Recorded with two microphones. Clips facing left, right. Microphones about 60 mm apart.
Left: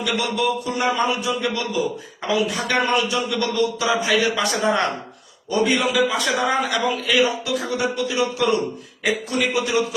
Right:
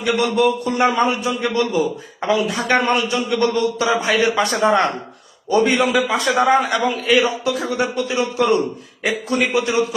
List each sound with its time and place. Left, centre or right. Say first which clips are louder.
0.0 s a man's voice: right 5 dB; right